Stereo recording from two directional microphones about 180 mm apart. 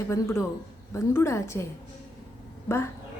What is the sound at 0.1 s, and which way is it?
A woman's voice, 15° left (ahead or behind).